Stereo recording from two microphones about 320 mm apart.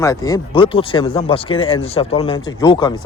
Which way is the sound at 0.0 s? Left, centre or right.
Centre.